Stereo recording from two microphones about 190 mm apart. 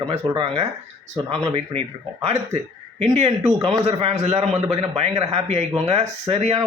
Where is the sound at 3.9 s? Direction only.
30° right (ahead or behind).